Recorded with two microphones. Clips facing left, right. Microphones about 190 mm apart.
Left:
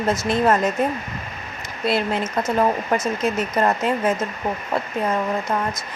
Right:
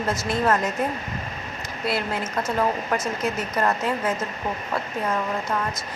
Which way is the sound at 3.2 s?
20° left (ahead or behind).